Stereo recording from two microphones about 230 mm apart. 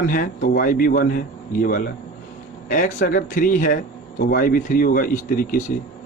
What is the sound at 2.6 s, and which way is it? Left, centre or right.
Speech, left.